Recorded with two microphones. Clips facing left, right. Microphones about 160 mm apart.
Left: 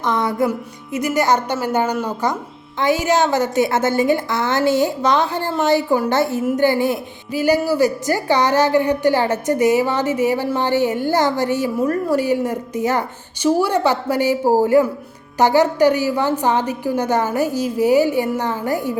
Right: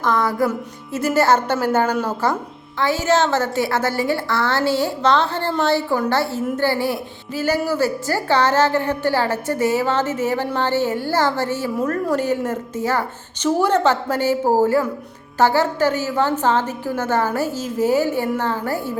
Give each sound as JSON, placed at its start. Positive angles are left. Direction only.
{"t": 0.0, "sound": "music", "side_deg": 20}
{"t": 0.9, "sound": "speech", "side_deg": 15}